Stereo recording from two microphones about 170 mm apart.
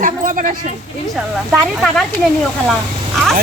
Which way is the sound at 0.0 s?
50° right (ahead or behind).